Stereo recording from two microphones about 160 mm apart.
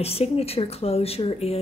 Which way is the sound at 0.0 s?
40° left (ahead or behind).